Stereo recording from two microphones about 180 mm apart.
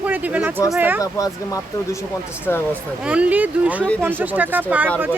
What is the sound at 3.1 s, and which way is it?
Speech, 5° right (ahead or behind).